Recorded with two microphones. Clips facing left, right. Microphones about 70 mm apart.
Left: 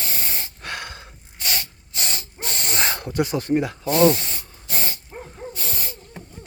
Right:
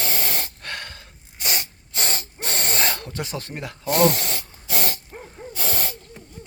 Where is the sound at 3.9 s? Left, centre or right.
Right.